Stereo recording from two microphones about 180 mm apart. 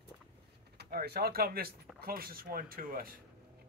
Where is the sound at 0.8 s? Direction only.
55° right (ahead or behind).